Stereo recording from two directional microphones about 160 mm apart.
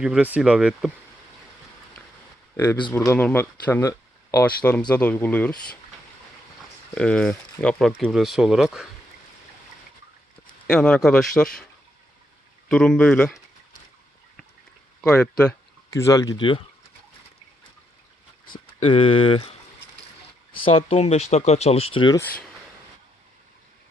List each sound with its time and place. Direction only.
0.0 s speech: 5° right (ahead or behind)
2.9 s speech: 15° left (ahead or behind)
6.9 s speech: 5° left (ahead or behind)
10.7 s speech: 5° left (ahead or behind)
12.6 s speech: 5° left (ahead or behind)
15.0 s speech: 10° left (ahead or behind)
15.9 s speech: 20° left (ahead or behind)
18.6 s speech: 35° left (ahead or behind)
22.1 s speech: 10° left (ahead or behind)